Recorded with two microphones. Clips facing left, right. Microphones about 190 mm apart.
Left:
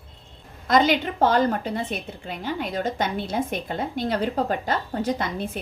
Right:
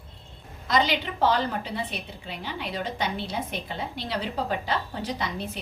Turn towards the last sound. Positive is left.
turn(degrees=50)  # may be behind; listen again after turning